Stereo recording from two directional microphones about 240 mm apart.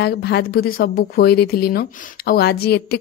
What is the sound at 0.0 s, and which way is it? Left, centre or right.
A woman's voice, left.